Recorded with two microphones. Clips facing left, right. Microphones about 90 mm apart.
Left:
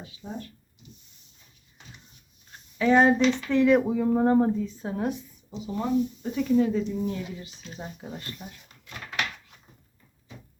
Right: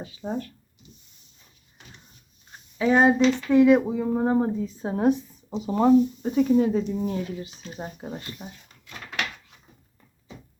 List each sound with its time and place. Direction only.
0.0 s speech: 65° right (ahead or behind)
2.7 s speech: 10° right (ahead or behind)
4.8 s speech: 25° right (ahead or behind)
5.6 s speech: 55° right (ahead or behind)
6.2 s speech: 35° right (ahead or behind)